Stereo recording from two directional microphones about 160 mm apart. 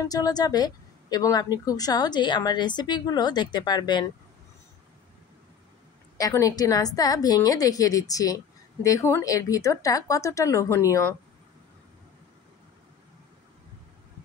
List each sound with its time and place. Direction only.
0.0 s a woman's voice: 25° left (ahead or behind)
6.1 s a woman's voice: 20° left (ahead or behind)